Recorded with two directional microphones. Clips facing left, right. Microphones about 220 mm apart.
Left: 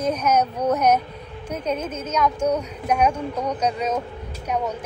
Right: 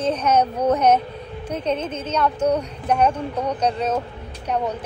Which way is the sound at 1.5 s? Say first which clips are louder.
Right 2 dB; 10° left (ahead or behind).